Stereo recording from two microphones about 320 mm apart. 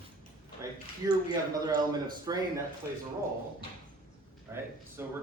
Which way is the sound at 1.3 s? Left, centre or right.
Centre.